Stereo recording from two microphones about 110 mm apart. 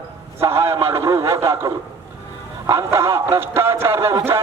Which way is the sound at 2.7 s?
25° right (ahead or behind).